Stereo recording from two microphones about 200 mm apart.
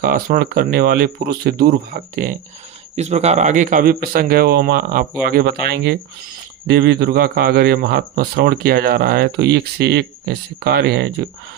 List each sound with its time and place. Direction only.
0.0 s a man's voice: 45° right (ahead or behind)
2.9 s a man's voice: 35° right (ahead or behind); by 11.1 s 55° right (ahead or behind)